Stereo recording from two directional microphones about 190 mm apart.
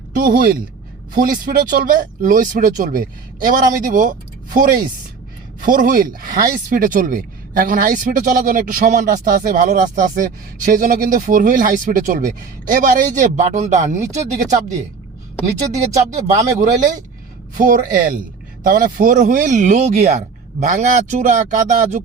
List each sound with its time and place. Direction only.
0.1 s a woman's voice: 50° right (ahead or behind)
16.1 s speech: 40° right (ahead or behind)